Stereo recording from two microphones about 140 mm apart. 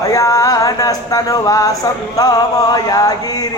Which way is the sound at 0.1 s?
25° left (ahead or behind).